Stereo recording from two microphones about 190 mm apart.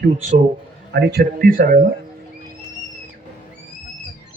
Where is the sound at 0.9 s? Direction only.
60° right (ahead or behind).